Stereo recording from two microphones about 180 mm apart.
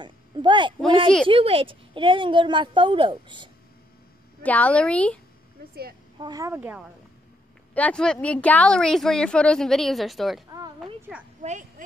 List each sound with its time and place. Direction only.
0.0 s a sound: 25° right (ahead or behind)
1.2 s a woman's voice: 30° right (ahead or behind)
4.4 s a woman's voice: 10° left (ahead or behind)
6.1 s speech: 20° right (ahead or behind)
7.7 s a woman's voice: 5° left (ahead or behind)